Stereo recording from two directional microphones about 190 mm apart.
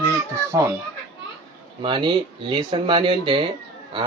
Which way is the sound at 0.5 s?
20° right (ahead or behind).